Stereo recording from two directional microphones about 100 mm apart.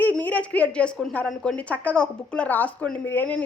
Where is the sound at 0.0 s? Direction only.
15° left (ahead or behind).